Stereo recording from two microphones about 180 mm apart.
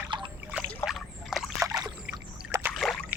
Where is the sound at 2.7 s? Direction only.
Centre (ahead or behind).